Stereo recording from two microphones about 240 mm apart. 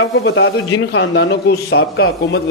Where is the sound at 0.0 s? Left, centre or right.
Left.